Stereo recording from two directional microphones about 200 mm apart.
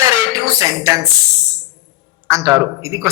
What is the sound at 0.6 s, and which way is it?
Speech, 15° right (ahead or behind).